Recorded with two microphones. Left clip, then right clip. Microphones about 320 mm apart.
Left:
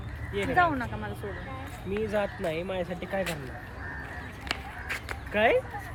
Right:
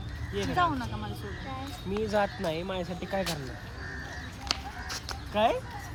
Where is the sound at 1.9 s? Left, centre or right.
Centre.